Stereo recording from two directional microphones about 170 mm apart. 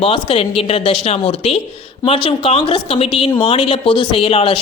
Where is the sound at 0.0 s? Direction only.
35° left (ahead or behind).